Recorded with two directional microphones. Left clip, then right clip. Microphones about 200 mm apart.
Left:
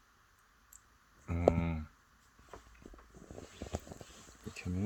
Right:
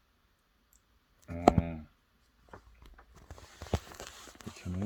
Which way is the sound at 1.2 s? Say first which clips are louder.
Right 4 dB; 50° left (ahead or behind).